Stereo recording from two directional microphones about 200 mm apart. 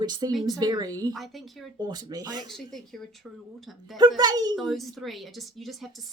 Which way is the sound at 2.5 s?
Centre (ahead or behind).